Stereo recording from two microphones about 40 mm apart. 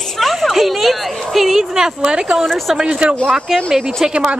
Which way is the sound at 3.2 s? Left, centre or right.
Centre.